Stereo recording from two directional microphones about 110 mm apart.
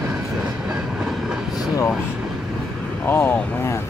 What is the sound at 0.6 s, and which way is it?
Train, 5° right (ahead or behind).